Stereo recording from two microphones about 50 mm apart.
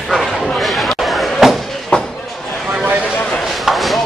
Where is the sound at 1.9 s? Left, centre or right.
Centre.